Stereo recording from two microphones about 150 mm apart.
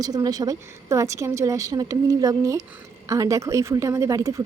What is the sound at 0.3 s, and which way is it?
Speech, 25° right (ahead or behind).